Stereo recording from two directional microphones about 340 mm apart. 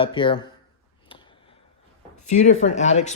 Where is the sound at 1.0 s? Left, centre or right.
Centre.